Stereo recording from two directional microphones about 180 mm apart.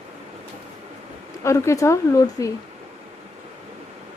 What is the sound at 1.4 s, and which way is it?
A woman's voice, 15° left (ahead or behind).